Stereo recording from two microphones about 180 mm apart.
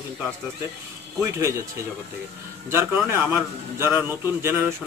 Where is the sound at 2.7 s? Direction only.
10° right (ahead or behind).